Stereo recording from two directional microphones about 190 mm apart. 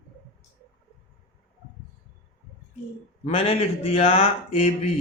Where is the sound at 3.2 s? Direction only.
30° left (ahead or behind).